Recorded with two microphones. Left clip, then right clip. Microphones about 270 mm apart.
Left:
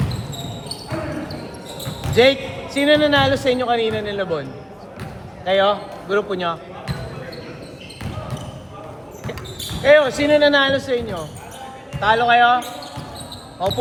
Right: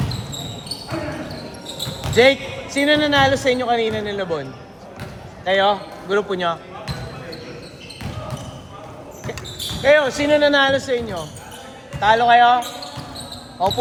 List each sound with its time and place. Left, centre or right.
2.1 s speech: right
5.5 s speech: right
9.8 s speech: right